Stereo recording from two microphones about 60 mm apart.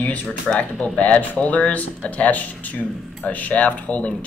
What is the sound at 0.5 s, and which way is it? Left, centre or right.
Speech, centre.